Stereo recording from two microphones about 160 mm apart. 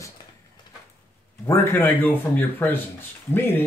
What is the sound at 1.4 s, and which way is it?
Speech, 15° left (ahead or behind).